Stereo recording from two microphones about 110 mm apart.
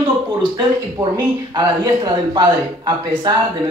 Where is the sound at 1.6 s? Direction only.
35° right (ahead or behind).